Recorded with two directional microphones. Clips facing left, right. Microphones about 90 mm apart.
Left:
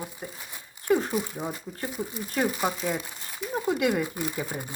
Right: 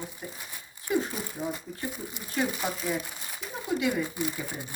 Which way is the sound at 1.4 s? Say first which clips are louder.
Even; 35° left (ahead or behind).